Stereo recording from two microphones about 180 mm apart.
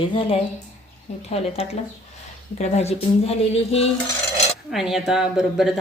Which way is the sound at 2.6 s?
35° left (ahead or behind).